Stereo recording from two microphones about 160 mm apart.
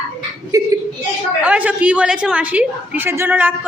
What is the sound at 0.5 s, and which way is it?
Speech, 20° right (ahead or behind).